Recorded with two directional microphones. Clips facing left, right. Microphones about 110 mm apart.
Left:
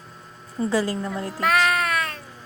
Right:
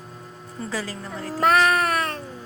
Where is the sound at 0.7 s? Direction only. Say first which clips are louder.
Left 7 dB; 30° left (ahead or behind).